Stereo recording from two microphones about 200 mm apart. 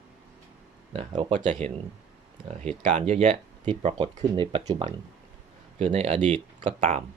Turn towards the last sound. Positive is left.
turn(degrees=-40)  # may be behind; listen again after turning